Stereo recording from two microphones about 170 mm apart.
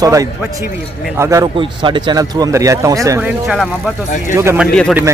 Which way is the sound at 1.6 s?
30° right (ahead or behind).